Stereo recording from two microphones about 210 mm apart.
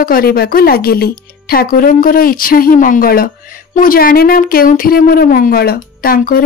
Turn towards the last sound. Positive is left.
turn(degrees=40)  # may be behind; listen again after turning